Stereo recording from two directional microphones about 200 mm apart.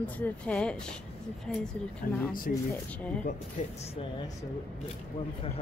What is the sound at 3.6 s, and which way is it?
Speech, 35° left (ahead or behind).